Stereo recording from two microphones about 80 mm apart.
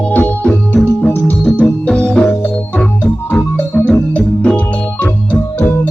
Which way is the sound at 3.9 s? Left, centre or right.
Centre.